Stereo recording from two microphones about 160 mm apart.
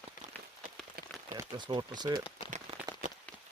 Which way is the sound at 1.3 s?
30° right (ahead or behind).